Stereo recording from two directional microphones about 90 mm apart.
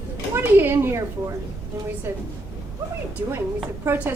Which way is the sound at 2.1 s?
25° right (ahead or behind).